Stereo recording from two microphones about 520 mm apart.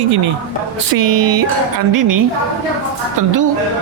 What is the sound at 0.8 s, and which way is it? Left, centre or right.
Speech, right.